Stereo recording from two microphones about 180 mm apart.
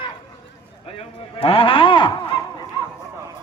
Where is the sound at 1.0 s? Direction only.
30° left (ahead or behind).